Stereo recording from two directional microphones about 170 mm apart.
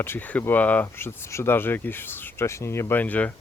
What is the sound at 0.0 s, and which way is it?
Speech, 10° left (ahead or behind).